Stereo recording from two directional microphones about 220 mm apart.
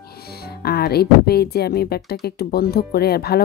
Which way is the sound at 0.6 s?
45° left (ahead or behind).